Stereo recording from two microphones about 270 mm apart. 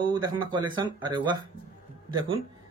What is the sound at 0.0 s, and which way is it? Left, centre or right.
Speech, centre.